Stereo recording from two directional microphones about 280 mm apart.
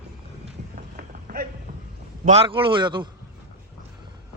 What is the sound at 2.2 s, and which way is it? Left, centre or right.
Speech, right.